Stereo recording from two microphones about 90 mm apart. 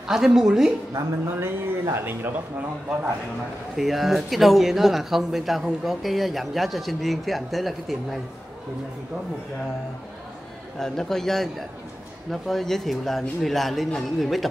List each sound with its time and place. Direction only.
0.1 s speech: 5° right (ahead or behind)
1.3 s speech: 25° right (ahead or behind)
3.7 s speech: centre (ahead or behind)
10.8 s speech: 5° left (ahead or behind)